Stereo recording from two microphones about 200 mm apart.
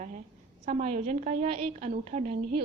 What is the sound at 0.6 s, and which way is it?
A woman's voice, 35° right (ahead or behind).